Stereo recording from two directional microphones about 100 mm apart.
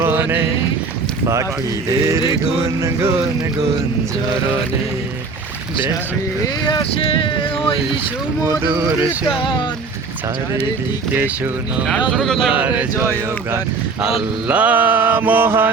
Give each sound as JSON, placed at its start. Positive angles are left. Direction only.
{"t": 0.0, "sound": "a sound", "side_deg": -20}
{"t": 1.9, "sound": "mantra", "side_deg": -30}
{"t": 6.4, "sound": "speech", "side_deg": 45}
{"t": 7.0, "sound": "a sound", "side_deg": 65}
{"t": 8.8, "sound": "speech", "side_deg": -30}
{"t": 11.9, "sound": "speech", "side_deg": 0}
{"t": 12.5, "sound": "speech", "side_deg": -15}
{"t": 13.0, "sound": "mantra", "side_deg": -25}
{"t": 14.4, "sound": "mantra", "side_deg": -15}